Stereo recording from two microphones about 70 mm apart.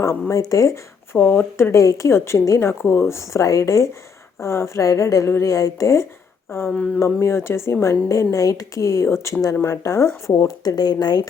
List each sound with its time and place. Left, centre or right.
0.0 s a woman's voice: left
1.2 s speech: left
1.7 s a woman's voice: left
2.6 s a woman's voice: left
6.7 s speech: centre
7.0 s a woman's voice: left
10.6 s speech: left